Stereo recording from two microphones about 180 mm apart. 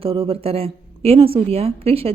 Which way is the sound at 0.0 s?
30° right (ahead or behind).